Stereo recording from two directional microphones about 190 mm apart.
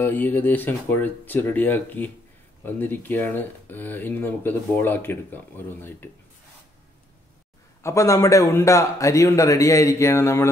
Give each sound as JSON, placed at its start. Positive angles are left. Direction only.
{"t": 0.0, "sound": "speech", "side_deg": 10}
{"t": 7.8, "sound": "speech", "side_deg": 15}